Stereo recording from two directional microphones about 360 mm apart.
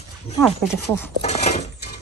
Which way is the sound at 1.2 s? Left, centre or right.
Centre.